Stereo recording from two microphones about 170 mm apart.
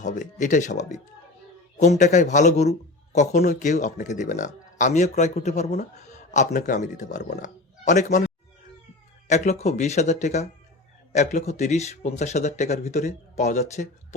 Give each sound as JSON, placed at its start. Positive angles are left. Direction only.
{"t": 0.0, "sound": "speech", "side_deg": 45}
{"t": 9.2, "sound": "speech", "side_deg": 45}